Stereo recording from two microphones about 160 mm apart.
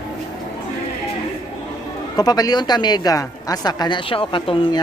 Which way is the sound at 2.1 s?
25° left (ahead or behind).